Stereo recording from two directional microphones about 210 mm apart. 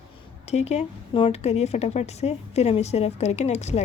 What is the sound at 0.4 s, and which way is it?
A woman's voice, 30° left (ahead or behind).